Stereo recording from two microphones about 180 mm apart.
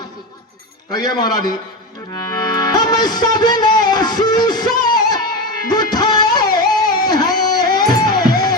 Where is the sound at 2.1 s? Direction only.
20° left (ahead or behind).